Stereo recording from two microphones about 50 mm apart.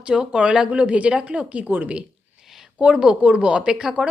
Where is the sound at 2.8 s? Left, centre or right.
Centre.